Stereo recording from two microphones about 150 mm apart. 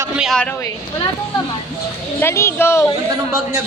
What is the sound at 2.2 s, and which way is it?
Speech, 15° left (ahead or behind).